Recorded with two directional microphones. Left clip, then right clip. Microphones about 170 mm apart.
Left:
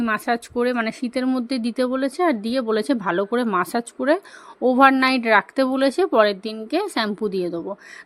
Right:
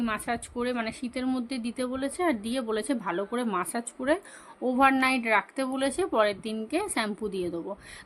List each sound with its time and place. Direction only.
0.0 s speech: 35° left (ahead or behind)